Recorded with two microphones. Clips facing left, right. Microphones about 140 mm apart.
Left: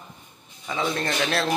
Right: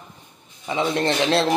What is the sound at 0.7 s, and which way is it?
Speech, 25° right (ahead or behind).